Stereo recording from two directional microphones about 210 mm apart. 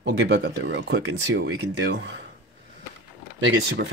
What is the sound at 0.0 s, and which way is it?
Speech, 60° right (ahead or behind).